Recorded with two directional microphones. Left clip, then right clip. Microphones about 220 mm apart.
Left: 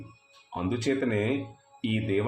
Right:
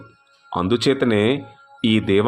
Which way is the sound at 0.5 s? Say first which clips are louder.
Right 10 dB; 40° right (ahead or behind).